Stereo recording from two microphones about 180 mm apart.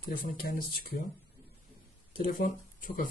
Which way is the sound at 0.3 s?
50° left (ahead or behind).